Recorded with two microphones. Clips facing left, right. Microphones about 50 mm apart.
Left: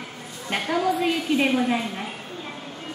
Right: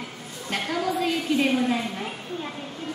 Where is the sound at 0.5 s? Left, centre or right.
Centre.